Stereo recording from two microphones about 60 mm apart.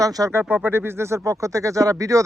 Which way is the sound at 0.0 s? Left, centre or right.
Right.